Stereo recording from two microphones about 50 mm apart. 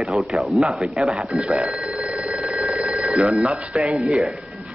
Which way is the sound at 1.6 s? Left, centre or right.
Centre.